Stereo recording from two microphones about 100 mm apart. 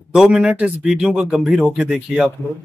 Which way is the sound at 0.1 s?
5° right (ahead or behind).